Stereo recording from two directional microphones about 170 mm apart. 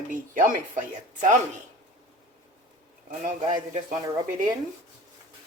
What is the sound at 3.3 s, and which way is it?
Speech, 45° right (ahead or behind).